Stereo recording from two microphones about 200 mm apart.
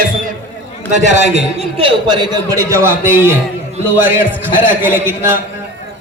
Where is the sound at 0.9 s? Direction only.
35° right (ahead or behind); by 3.4 s 10° right (ahead or behind).